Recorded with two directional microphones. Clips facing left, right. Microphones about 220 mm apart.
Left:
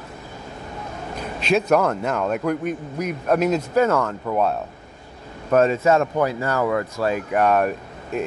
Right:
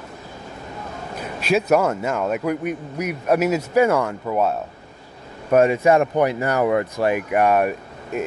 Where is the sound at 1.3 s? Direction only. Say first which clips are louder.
Even; 5° right (ahead or behind).